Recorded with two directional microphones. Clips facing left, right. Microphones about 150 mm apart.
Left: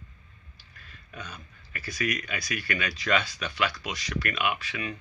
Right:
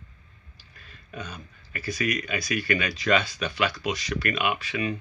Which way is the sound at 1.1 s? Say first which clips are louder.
Right 4 dB; 20° right (ahead or behind).